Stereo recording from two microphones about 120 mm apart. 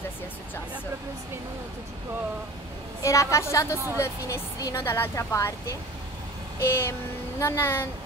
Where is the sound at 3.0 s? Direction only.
25° left (ahead or behind).